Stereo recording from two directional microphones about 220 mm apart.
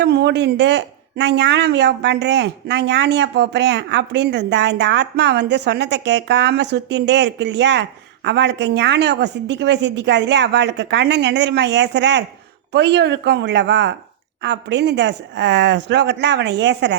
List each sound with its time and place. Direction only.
0.0 s speech: 50° right (ahead or behind)